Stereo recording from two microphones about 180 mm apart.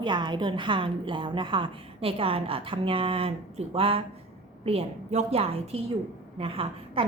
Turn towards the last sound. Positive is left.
turn(degrees=-30)  # may be behind; listen again after turning